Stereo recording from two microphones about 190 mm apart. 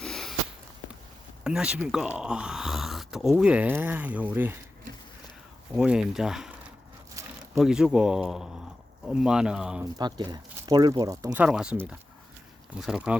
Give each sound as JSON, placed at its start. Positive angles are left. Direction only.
{"t": 0.0, "sound": "a sound", "side_deg": 0}
{"t": 1.5, "sound": "speech", "side_deg": -5}
{"t": 5.7, "sound": "speech", "side_deg": -5}
{"t": 7.1, "sound": "a sound", "side_deg": -15}
{"t": 7.6, "sound": "speech", "side_deg": -5}
{"t": 10.0, "sound": "speech", "side_deg": -20}
{"t": 11.4, "sound": "speech", "side_deg": -5}